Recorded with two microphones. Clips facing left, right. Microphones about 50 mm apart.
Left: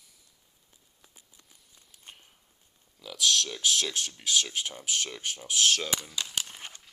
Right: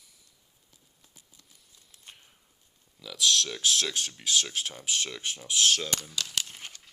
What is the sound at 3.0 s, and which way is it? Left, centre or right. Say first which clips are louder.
Speech: right 1 dB; left.